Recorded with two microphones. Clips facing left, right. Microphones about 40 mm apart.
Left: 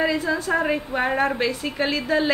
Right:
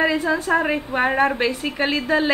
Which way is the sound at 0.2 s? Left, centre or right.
Centre.